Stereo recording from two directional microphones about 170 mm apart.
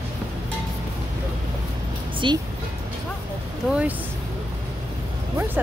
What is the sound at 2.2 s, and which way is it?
Speech, 30° right (ahead or behind).